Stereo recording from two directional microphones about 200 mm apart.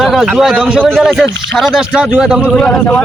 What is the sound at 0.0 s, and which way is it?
A man's voice, centre (ahead or behind).